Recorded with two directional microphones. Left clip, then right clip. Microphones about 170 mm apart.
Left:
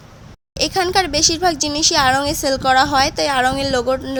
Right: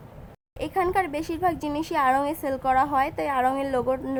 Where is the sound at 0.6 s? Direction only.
35° left (ahead or behind).